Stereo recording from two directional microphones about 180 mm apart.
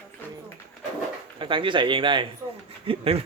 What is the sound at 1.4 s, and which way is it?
Speech, 30° right (ahead or behind).